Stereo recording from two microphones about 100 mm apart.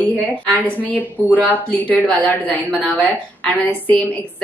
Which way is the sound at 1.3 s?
15° left (ahead or behind).